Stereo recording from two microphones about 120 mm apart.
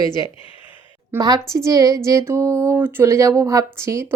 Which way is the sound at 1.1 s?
20° right (ahead or behind).